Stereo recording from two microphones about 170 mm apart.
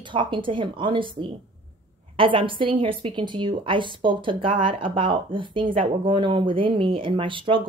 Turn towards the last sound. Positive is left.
turn(degrees=-30)  # may be behind; listen again after turning